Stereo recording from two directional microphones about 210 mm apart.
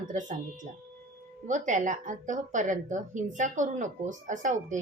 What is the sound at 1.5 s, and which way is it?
A woman's voice, 35° right (ahead or behind).